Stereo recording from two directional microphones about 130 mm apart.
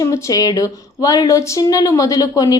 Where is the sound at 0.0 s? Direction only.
25° left (ahead or behind).